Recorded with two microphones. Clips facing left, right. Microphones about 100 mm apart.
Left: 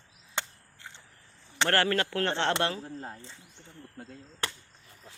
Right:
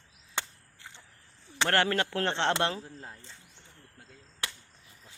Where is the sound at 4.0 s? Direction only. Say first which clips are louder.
Left 4 dB; 45° left (ahead or behind).